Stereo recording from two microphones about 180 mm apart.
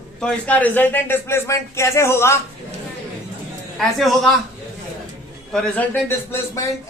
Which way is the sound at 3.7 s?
Centre (ahead or behind).